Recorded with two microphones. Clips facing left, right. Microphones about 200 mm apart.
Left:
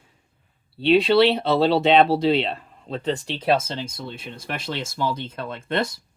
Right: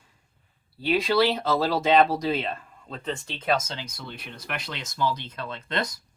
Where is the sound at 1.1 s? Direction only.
25° left (ahead or behind).